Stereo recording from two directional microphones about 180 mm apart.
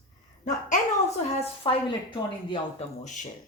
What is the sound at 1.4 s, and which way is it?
A woman's voice, 30° left (ahead or behind).